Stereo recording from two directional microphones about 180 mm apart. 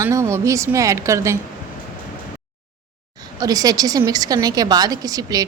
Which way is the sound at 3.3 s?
20° right (ahead or behind).